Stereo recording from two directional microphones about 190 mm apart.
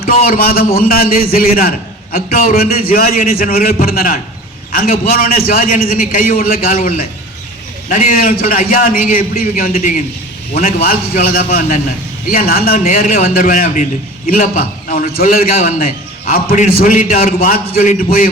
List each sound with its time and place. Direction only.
0.0 s a man's voice: 50° left (ahead or behind)